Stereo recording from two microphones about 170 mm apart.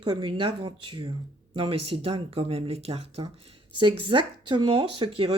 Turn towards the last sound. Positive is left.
turn(degrees=-30)  # may be behind; listen again after turning